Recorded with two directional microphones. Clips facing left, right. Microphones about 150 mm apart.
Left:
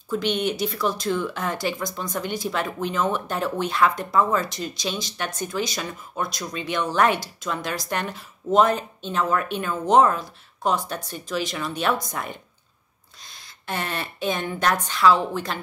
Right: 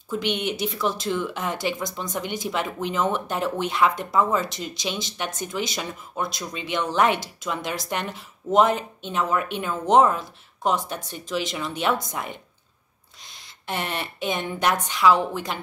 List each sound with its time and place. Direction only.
0.1 s speech: 20° right (ahead or behind)